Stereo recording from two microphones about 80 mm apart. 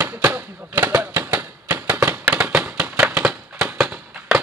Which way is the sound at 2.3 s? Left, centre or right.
Centre.